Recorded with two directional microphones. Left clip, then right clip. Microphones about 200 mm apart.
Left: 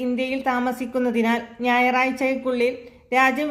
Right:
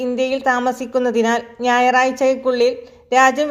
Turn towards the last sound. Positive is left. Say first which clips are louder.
# right 6 dB
turn(degrees=-30)  # may be behind; listen again after turning